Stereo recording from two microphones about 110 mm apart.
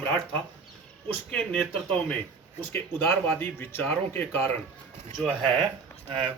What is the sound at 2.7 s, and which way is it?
Speech, 20° left (ahead or behind).